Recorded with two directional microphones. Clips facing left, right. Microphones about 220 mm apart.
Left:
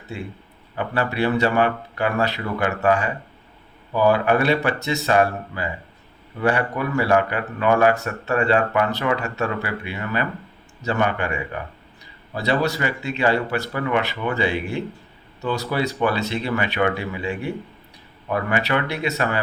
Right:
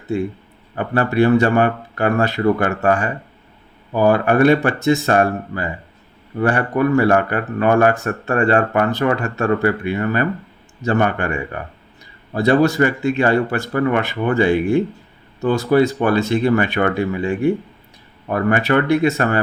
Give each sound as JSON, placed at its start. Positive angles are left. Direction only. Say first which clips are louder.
{"t": 0.1, "sound": "speech", "louder": "right 11 dB", "side_deg": -50}